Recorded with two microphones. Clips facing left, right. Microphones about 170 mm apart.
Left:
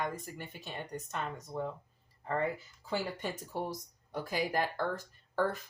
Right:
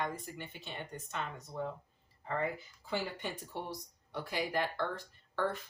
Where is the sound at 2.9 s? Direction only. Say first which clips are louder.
Left 2 dB; 40° left (ahead or behind).